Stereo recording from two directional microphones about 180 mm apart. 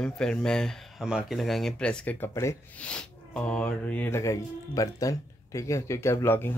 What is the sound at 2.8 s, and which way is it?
Speech, 5° left (ahead or behind).